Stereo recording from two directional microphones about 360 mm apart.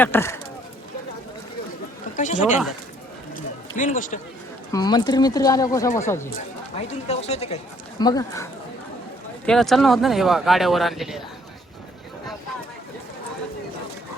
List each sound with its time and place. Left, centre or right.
0.0 s speech: centre
2.1 s speech: centre
3.3 s a sound: left
4.7 s speech: centre
9.5 s speech: centre